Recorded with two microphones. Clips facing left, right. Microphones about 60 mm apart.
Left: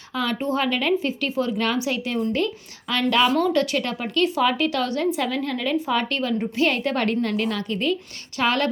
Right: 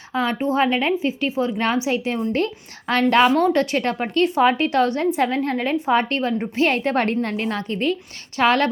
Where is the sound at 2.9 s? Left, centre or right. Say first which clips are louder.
Right 4 dB; right.